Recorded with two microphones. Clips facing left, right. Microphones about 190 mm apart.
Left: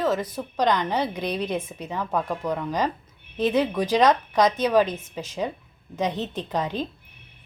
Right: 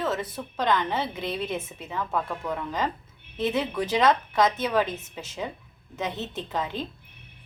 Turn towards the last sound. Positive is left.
turn(degrees=20)  # may be behind; listen again after turning